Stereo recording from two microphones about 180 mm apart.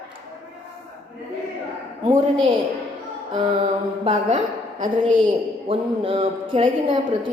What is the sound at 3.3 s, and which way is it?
A man's voice, 30° right (ahead or behind).